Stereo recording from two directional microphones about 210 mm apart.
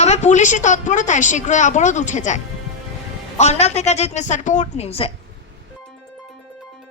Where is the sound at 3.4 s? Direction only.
30° left (ahead or behind).